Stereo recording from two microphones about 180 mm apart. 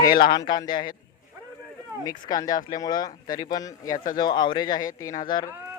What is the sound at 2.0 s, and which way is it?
Speech, 20° left (ahead or behind).